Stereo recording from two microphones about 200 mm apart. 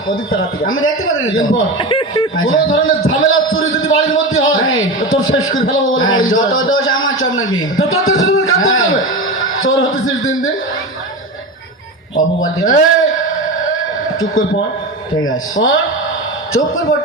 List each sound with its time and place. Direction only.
0.7 s a man's voice: 90° left
1.8 s speech: 25° left (ahead or behind)
2.3 s a man's voice: 90° left
12.1 s a man's voice: 85° left
15.2 s a man's voice: 85° left